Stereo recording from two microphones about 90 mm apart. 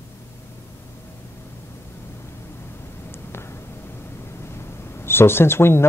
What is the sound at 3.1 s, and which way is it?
Vehicle, 25° left (ahead or behind).